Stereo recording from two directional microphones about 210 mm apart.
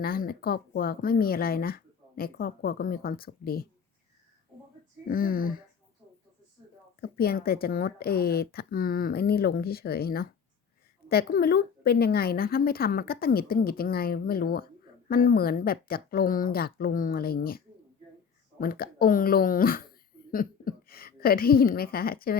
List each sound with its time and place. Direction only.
0.0 s speech: 45° left (ahead or behind)
5.0 s speech: 40° left (ahead or behind)
7.0 s speech: 45° left (ahead or behind)
18.6 s speech: 45° left (ahead or behind)